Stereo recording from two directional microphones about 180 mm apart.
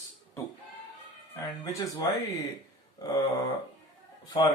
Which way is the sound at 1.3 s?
20° left (ahead or behind).